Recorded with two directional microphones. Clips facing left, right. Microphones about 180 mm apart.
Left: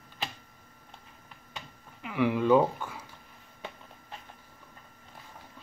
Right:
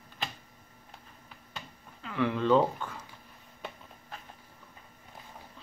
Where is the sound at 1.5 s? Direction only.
15° left (ahead or behind).